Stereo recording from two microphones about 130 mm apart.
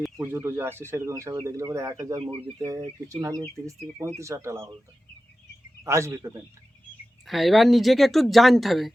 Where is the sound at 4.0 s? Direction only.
20° right (ahead or behind).